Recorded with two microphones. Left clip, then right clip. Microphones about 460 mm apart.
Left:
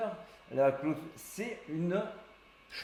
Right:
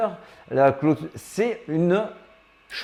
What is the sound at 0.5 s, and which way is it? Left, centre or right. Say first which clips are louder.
Speech: right 11 dB; right.